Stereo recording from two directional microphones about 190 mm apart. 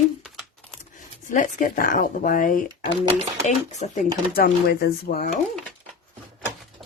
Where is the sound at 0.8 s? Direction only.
45° left (ahead or behind).